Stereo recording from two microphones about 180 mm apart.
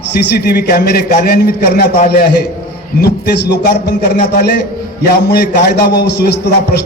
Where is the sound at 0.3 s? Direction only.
60° left (ahead or behind).